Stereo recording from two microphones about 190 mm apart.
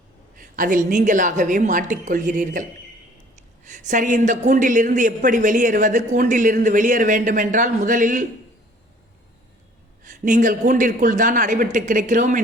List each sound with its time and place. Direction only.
0.3 s a woman's voice: 45° right (ahead or behind)
10.0 s a woman's voice: 40° right (ahead or behind)